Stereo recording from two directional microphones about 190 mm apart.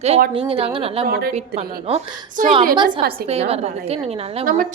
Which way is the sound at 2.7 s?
25° right (ahead or behind).